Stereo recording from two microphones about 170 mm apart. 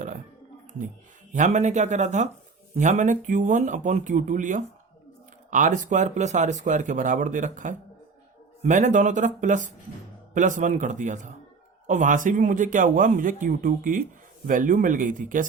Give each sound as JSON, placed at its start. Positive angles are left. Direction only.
{"t": 1.3, "sound": "speech", "side_deg": -45}